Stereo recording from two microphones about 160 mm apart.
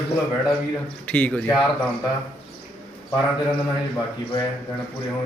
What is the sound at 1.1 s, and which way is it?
Speech, 10° left (ahead or behind).